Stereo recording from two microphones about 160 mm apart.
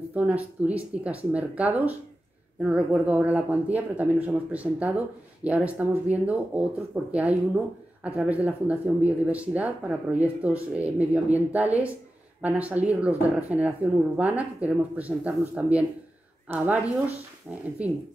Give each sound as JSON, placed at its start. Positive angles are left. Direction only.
{"t": 0.1, "sound": "speech", "side_deg": -10}